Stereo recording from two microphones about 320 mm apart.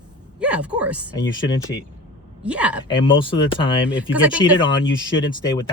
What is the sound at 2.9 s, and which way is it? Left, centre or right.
Speech, centre.